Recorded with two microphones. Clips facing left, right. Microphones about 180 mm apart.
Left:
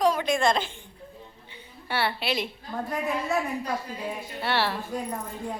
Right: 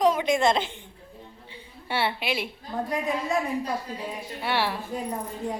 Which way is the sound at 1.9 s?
20° right (ahead or behind).